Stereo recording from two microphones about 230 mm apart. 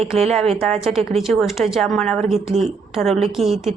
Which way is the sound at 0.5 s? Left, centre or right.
Centre.